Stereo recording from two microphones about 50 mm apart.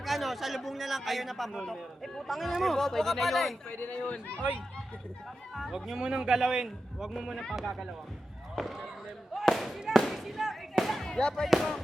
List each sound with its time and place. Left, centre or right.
0.0 s speech: centre
3.8 s speech: left
5.5 s speech: centre
6.0 s a man's voice: centre
8.6 s speech: centre
9.3 s a sound: centre
10.1 s fireworks: centre
11.4 s speech: centre